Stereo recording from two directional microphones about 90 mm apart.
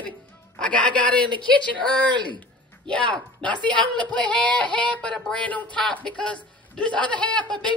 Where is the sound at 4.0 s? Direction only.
15° left (ahead or behind).